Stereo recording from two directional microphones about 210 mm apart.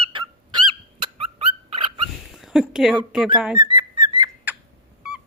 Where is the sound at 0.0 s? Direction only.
20° right (ahead or behind).